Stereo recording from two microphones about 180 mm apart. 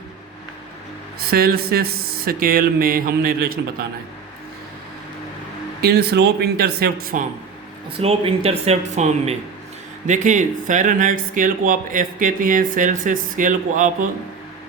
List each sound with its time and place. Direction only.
1.3 s speech: 60° right (ahead or behind)
5.8 s speech: 60° right (ahead or behind)
7.9 s speech: 30° right (ahead or behind); by 14.1 s 45° right (ahead or behind)